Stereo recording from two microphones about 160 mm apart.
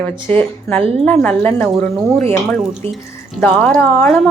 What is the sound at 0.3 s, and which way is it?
A woman's voice, 10° left (ahead or behind).